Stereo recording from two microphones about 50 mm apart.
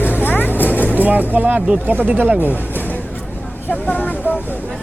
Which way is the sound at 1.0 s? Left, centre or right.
Right.